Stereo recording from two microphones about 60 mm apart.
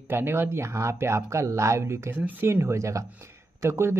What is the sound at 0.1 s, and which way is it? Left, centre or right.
Speech, right.